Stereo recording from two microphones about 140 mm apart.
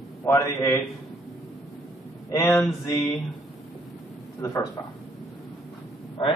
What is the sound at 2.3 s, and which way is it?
Speech, 20° left (ahead or behind).